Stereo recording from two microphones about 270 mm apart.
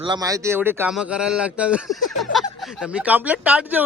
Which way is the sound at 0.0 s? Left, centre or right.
Centre.